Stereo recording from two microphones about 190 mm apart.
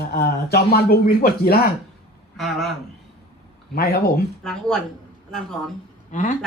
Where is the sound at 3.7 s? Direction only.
50° left (ahead or behind).